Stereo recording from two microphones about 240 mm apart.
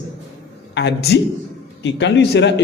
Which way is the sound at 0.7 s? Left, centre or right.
Left.